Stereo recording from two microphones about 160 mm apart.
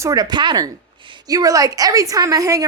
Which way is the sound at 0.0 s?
20° right (ahead or behind).